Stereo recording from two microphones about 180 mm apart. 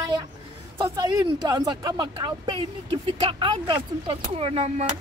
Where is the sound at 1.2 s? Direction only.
25° right (ahead or behind).